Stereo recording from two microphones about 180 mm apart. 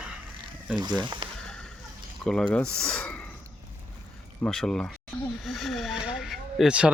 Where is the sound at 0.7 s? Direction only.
25° right (ahead or behind).